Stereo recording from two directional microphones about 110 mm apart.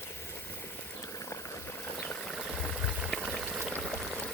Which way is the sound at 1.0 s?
25° left (ahead or behind).